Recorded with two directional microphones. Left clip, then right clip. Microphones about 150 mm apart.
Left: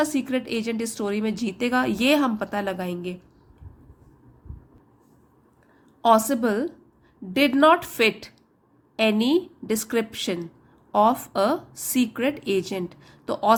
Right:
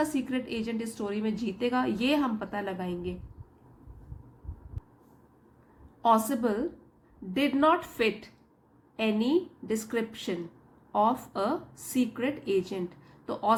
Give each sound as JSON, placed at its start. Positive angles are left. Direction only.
{"t": 0.0, "sound": "a woman's voice", "side_deg": 40}
{"t": 6.0, "sound": "a woman's voice", "side_deg": 40}